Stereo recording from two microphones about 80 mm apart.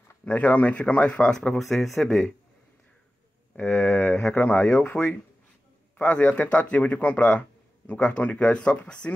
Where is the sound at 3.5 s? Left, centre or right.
Centre.